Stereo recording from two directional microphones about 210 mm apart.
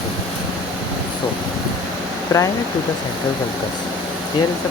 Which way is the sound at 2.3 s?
15° left (ahead or behind).